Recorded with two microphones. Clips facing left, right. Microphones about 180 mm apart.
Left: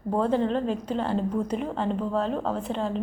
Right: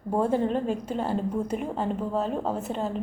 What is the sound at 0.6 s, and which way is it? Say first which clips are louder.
Speech: left 1 dB; 50° right (ahead or behind).